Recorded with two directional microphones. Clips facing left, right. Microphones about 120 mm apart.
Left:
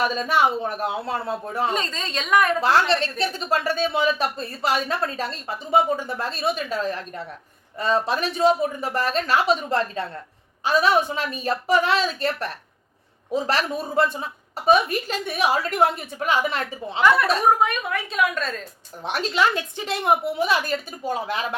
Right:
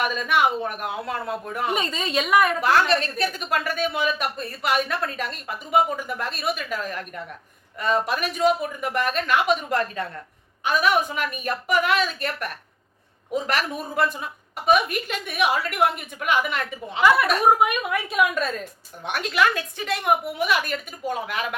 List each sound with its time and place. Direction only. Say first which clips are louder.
0.0 s a woman's voice: left 1 dB; 30° left (ahead or behind)
1.7 s a woman's voice: right 2 dB; 10° right (ahead or behind)
2.6 s a woman's voice: even; 30° left (ahead or behind)
17.0 s a woman's voice: even; 5° right (ahead or behind)
19.0 s a woman's voice: even; 30° left (ahead or behind)